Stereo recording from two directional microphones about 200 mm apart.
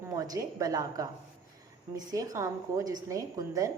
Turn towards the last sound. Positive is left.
turn(degrees=-15)  # may be behind; listen again after turning